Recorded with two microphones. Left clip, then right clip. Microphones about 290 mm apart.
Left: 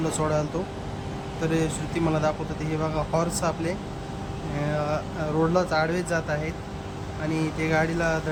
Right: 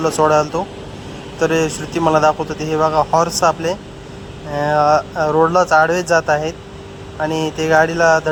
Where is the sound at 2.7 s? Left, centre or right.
Right.